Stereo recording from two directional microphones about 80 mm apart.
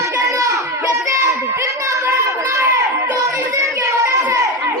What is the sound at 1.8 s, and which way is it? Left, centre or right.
Children playing, right.